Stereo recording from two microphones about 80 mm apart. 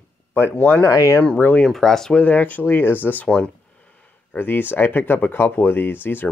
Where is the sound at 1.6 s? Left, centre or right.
Centre.